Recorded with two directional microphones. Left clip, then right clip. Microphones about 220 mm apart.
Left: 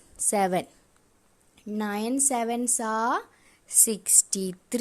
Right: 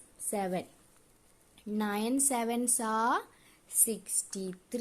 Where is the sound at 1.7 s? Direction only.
15° left (ahead or behind).